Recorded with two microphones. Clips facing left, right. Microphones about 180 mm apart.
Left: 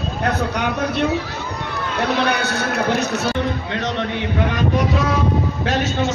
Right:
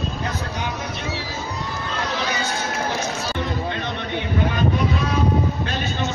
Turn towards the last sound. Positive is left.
turn(degrees=80)